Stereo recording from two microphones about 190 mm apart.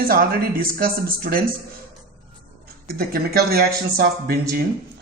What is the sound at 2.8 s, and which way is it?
Speech, 50° right (ahead or behind).